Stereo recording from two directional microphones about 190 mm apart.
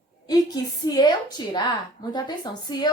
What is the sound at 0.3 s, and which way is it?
A woman's voice, 20° left (ahead or behind).